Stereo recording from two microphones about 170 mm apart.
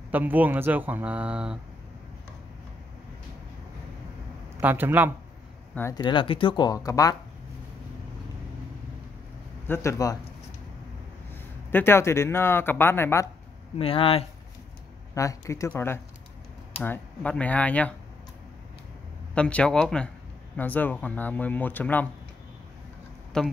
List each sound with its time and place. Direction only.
0.1 s speech: 10° right (ahead or behind)
4.6 s speech: 10° right (ahead or behind)
5.8 s speech: 20° left (ahead or behind)
9.7 s speech: 15° left (ahead or behind)
11.7 s speech: 15° left (ahead or behind)
13.7 s speech: 35° left (ahead or behind)
15.1 s speech: 20° left (ahead or behind)
19.3 s speech: 5° left (ahead or behind)
23.3 s speech: 5° left (ahead or behind)